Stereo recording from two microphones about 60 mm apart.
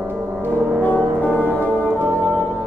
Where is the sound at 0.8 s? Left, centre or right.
Left.